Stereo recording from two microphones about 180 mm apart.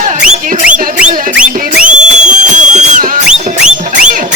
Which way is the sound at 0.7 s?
5° right (ahead or behind).